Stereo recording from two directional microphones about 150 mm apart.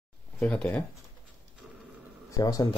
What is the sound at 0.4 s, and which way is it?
Speech, 10° left (ahead or behind).